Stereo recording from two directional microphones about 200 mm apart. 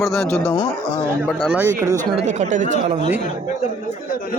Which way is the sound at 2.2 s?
40° right (ahead or behind).